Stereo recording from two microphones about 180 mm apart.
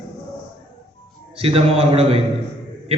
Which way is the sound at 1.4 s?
35° right (ahead or behind).